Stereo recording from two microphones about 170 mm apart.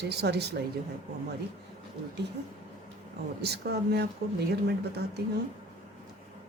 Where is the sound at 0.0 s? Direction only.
75° right (ahead or behind).